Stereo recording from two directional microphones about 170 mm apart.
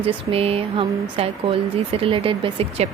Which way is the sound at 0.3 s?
35° right (ahead or behind).